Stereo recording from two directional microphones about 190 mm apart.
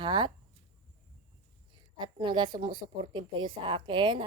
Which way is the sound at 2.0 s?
25° right (ahead or behind).